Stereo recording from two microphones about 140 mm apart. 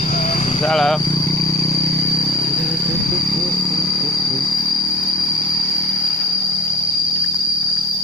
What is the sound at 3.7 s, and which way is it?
Vehicle, 5° left (ahead or behind).